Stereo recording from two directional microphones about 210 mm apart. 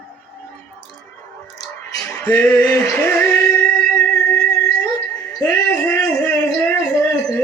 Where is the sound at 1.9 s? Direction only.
5° left (ahead or behind).